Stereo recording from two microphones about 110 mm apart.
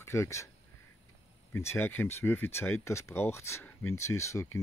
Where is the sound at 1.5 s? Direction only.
25° left (ahead or behind).